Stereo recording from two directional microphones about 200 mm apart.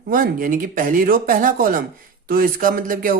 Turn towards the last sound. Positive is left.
turn(degrees=-45)  # may be behind; listen again after turning